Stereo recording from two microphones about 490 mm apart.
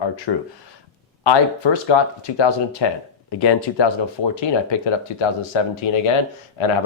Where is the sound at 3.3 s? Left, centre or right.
Left.